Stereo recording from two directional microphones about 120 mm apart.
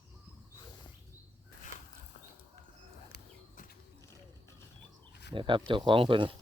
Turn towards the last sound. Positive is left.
turn(degrees=-45)  # may be behind; listen again after turning